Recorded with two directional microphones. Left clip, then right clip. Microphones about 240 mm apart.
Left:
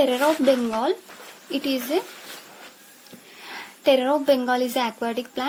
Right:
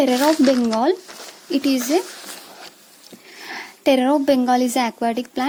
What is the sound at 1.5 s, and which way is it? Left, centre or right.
Speech, right.